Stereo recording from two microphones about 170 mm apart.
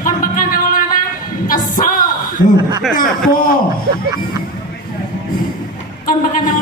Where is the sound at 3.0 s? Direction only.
55° left (ahead or behind).